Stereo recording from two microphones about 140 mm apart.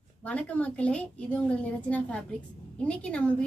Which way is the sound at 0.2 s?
10° left (ahead or behind).